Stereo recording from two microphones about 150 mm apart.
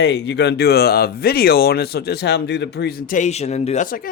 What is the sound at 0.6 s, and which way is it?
Speech, 90° left.